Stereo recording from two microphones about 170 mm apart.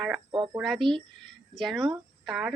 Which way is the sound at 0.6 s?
Centre (ahead or behind).